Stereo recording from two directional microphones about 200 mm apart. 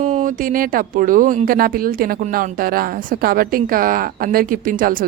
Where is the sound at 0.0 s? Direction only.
35° right (ahead or behind).